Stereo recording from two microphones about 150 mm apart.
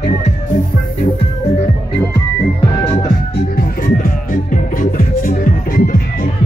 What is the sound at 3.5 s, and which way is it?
Music, 65° left (ahead or behind).